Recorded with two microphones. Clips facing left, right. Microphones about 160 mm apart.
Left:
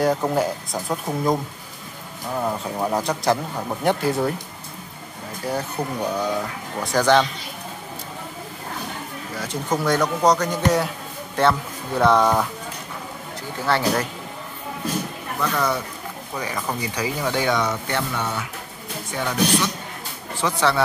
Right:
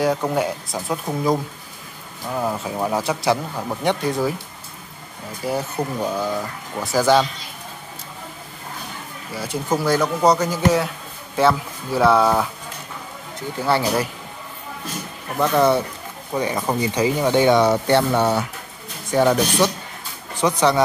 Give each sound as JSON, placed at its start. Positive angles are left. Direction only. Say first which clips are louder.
{"t": 0.0, "sound": "speech", "louder": "even", "side_deg": 0}
{"t": 5.4, "sound": "speech", "louder": "right 2 dB", "side_deg": -5}
{"t": 9.3, "sound": "speech", "louder": "right 2 dB", "side_deg": -10}
{"t": 13.7, "sound": "speech", "louder": "right 1 dB", "side_deg": -10}
{"t": 15.5, "sound": "speech", "louder": "right 10 dB", "side_deg": -25}
{"t": 20.3, "sound": "speech", "louder": "right 4 dB", "side_deg": -15}